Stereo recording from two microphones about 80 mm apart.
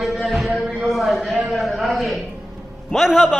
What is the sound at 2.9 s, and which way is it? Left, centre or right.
Speech, centre.